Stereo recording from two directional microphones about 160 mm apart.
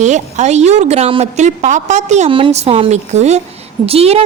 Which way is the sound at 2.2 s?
35° right (ahead or behind).